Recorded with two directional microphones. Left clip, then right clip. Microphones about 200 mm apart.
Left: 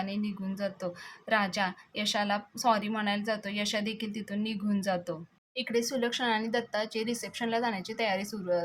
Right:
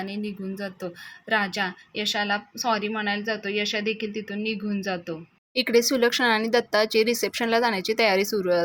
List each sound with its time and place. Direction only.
0.0 s a woman's voice: 10° right (ahead or behind)
5.5 s speech: 30° right (ahead or behind)